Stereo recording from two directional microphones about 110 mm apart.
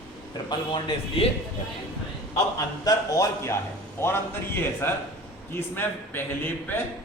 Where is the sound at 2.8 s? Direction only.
30° left (ahead or behind).